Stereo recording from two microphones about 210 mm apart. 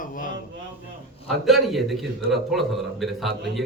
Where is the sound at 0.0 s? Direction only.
40° left (ahead or behind).